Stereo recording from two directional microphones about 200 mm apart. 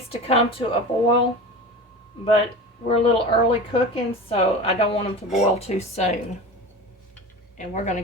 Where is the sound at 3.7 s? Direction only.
25° left (ahead or behind).